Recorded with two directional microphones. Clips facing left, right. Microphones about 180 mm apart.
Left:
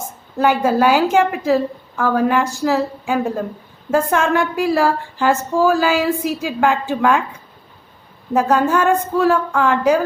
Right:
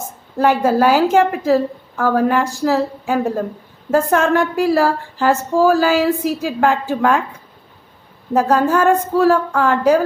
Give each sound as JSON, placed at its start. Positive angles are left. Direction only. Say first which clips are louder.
{"t": 0.3, "sound": "speech", "louder": "right 1 dB", "side_deg": -40}
{"t": 8.3, "sound": "speech", "louder": "right 1 dB", "side_deg": -40}